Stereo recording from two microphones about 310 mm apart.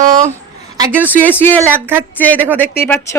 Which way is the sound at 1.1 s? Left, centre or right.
Centre.